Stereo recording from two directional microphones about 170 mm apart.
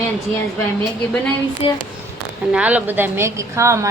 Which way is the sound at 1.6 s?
35° left (ahead or behind).